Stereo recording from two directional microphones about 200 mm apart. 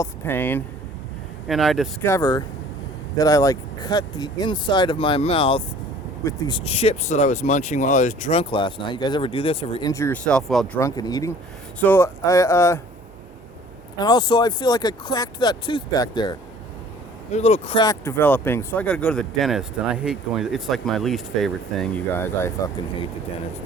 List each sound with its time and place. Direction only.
0.0 s speech: 10° left (ahead or behind)
1.5 s speech: centre (ahead or behind)
2.0 s speech: 15° left (ahead or behind)
9.9 s speech: 10° left (ahead or behind)
10.8 s speech: 15° left (ahead or behind)
14.0 s speech: 20° left (ahead or behind)
17.8 s speech: 10° left (ahead or behind)